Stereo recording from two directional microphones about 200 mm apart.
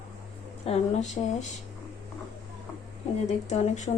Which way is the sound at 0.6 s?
30° left (ahead or behind).